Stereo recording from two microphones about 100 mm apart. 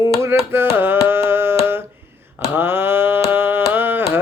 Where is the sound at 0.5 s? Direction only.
20° right (ahead or behind).